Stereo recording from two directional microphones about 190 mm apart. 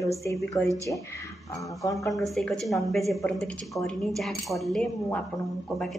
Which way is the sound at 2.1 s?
Centre (ahead or behind).